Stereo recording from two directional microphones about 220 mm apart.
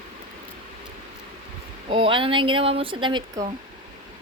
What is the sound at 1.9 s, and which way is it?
Speech, 25° right (ahead or behind).